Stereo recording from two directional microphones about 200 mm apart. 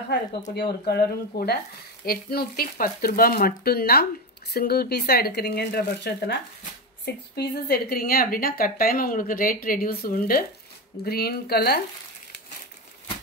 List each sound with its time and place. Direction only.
0.6 s speech: 55° left (ahead or behind)
7.3 s speech: 50° left (ahead or behind)